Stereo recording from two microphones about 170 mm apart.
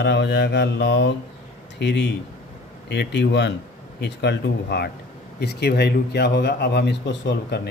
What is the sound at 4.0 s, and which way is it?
Speech, 80° left.